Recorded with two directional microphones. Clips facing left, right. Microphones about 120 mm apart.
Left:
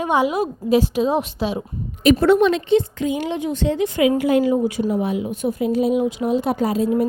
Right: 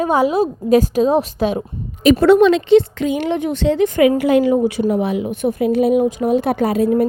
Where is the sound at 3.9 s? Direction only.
50° right (ahead or behind).